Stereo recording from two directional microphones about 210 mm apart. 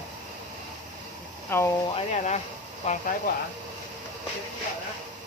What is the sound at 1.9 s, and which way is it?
Speech, 30° left (ahead or behind).